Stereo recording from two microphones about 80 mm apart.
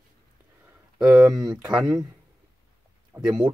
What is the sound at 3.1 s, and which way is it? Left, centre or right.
Speech, centre.